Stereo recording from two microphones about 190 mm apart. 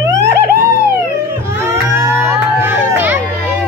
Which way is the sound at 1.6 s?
10° right (ahead or behind).